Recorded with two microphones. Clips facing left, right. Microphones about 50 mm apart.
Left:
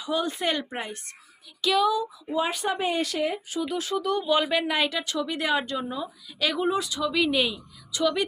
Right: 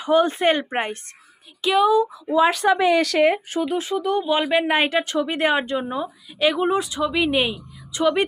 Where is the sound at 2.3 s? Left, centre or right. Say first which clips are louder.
Right 9 dB; right.